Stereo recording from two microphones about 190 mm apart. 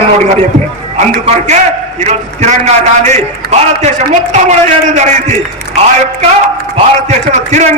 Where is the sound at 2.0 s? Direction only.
35° right (ahead or behind).